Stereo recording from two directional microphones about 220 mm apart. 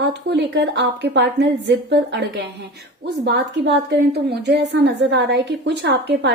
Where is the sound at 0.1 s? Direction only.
50° right (ahead or behind).